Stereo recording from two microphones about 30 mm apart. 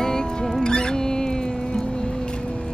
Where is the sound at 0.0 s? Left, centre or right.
Left.